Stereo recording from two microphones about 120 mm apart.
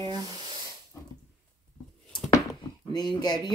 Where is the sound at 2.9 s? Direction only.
35° left (ahead or behind).